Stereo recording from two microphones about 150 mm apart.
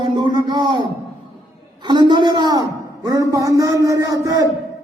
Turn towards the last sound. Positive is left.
turn(degrees=-25)  # may be behind; listen again after turning